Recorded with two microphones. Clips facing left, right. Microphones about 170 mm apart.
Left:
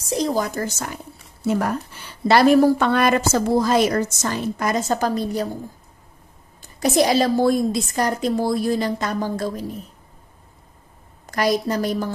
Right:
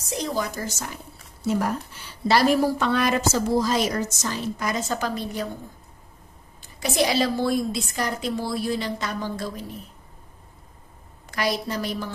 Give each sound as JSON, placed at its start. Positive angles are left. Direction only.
{"t": 0.1, "sound": "a woman's voice", "side_deg": 40}
{"t": 1.4, "sound": "a woman's voice", "side_deg": 60}
{"t": 6.8, "sound": "a woman's voice", "side_deg": 45}
{"t": 11.2, "sound": "a woman's voice", "side_deg": 45}